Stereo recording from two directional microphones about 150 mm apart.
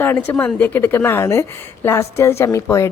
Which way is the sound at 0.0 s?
10° left (ahead or behind).